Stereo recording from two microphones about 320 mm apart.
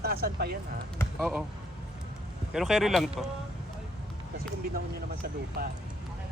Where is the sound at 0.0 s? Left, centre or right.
Right.